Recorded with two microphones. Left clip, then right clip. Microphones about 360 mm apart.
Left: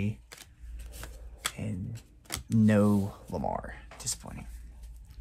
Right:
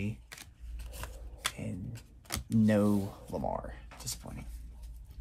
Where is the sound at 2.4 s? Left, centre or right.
Left.